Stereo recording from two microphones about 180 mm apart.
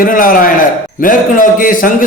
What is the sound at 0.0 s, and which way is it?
A man's voice, 50° left (ahead or behind).